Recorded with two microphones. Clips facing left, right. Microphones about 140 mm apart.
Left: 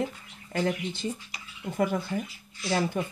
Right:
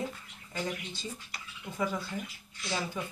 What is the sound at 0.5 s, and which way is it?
Speech, 60° left (ahead or behind).